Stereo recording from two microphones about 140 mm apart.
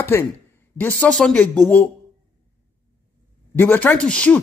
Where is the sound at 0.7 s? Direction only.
10° left (ahead or behind).